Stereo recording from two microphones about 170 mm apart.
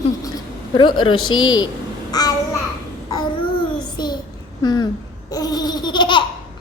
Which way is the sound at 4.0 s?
25° left (ahead or behind).